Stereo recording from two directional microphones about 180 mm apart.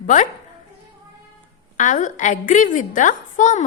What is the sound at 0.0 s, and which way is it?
Speech, 45° left (ahead or behind).